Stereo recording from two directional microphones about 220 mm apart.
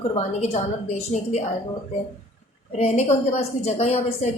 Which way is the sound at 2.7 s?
30° left (ahead or behind).